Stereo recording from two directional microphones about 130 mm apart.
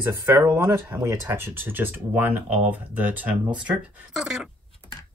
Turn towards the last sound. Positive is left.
turn(degrees=-5)  # may be behind; listen again after turning